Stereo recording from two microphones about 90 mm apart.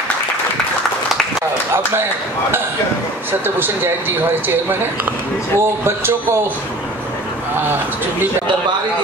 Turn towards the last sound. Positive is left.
turn(degrees=-25)  # may be behind; listen again after turning